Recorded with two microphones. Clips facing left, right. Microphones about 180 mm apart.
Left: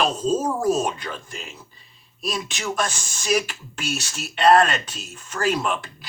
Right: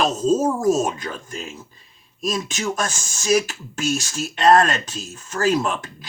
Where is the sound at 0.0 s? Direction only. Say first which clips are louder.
Right 3 dB; 40° right (ahead or behind).